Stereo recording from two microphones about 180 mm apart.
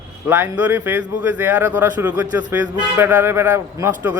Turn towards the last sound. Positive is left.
turn(degrees=-15)  # may be behind; listen again after turning